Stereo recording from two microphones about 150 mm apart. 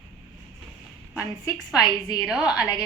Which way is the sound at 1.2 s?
25° left (ahead or behind).